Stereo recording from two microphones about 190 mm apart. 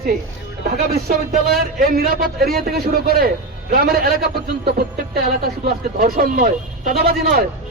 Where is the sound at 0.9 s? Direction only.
50° right (ahead or behind).